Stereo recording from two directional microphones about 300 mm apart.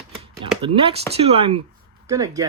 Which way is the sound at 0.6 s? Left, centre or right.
Centre.